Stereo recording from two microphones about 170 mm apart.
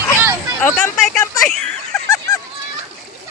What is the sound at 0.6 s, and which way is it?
Speech, 10° left (ahead or behind).